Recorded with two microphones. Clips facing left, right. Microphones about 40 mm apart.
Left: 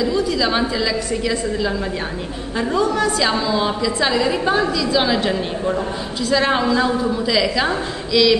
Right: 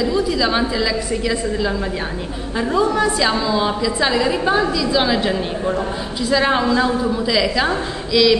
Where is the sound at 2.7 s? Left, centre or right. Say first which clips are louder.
Right 1 dB; centre.